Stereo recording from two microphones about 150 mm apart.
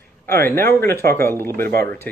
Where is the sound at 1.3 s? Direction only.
15° left (ahead or behind).